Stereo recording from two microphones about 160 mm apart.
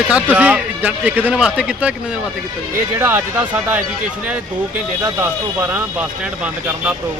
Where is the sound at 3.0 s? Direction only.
15° right (ahead or behind).